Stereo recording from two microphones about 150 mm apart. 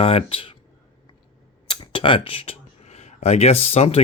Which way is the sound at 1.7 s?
35° left (ahead or behind).